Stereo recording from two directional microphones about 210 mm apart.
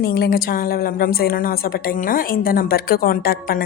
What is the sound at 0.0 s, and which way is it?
A woman's voice, 50° left (ahead or behind).